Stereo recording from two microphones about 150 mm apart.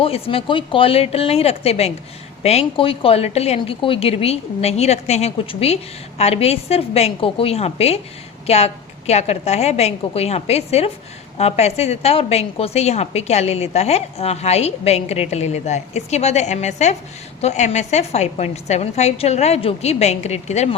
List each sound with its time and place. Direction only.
0.0 s a woman's voice: 40° left (ahead or behind)